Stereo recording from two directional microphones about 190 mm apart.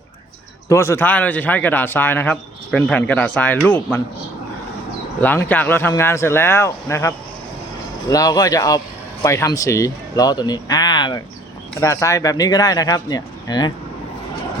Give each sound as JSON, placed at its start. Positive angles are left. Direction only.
{"t": 0.7, "sound": "a man's voice", "side_deg": 15}
{"t": 5.2, "sound": "a man's voice", "side_deg": 10}
{"t": 8.1, "sound": "speech", "side_deg": 20}